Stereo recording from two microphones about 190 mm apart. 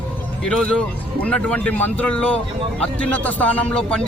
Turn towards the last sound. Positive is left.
turn(degrees=5)  # may be behind; listen again after turning